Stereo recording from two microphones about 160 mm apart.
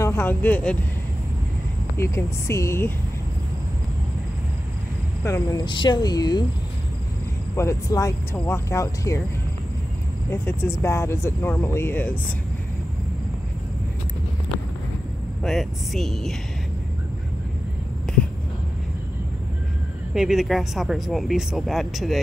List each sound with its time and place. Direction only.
0.0 s speech: 15° left (ahead or behind)
2.0 s speech: 15° left (ahead or behind)
5.2 s speech: 20° left (ahead or behind)
7.5 s speech: 20° left (ahead or behind)
10.3 s speech: 15° left (ahead or behind)
15.4 s speech: centre (ahead or behind)
18.1 s a sound: 5° left (ahead or behind)
20.2 s speech: centre (ahead or behind)